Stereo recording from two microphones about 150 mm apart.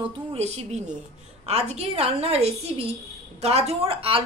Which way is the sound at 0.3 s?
45° right (ahead or behind).